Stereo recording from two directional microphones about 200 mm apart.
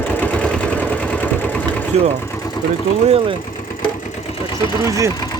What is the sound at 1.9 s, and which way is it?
Speech, 30° right (ahead or behind).